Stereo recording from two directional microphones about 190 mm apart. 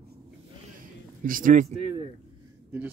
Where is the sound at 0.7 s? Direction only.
45° right (ahead or behind).